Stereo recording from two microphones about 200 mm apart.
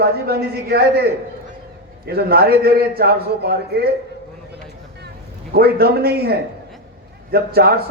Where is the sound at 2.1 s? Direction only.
50° right (ahead or behind).